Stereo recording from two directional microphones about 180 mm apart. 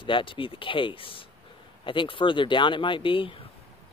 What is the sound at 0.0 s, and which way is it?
Speech, 30° left (ahead or behind).